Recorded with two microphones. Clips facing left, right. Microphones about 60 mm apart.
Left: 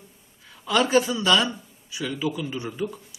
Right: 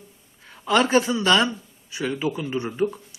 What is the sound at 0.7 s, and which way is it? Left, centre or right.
Speech, right.